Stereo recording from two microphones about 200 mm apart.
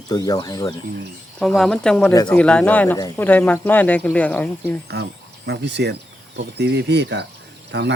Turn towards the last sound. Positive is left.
turn(degrees=-60)  # may be behind; listen again after turning